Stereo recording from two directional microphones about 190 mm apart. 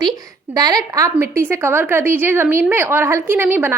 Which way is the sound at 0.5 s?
20° right (ahead or behind).